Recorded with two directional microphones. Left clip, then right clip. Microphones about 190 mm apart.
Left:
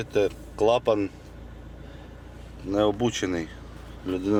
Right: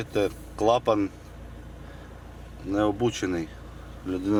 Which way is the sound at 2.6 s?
10° left (ahead or behind).